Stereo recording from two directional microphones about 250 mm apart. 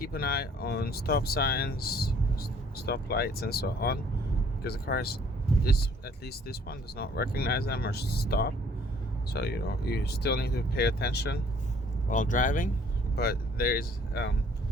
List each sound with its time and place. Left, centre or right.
0.0 s speech: left
6.2 s speech: left